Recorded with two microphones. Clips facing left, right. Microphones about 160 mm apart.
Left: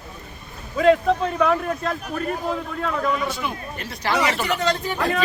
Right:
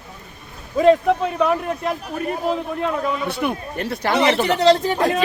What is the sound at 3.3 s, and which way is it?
Speech, 60° right (ahead or behind).